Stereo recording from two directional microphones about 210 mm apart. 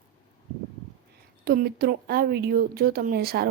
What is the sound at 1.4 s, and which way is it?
Speech, 45° right (ahead or behind).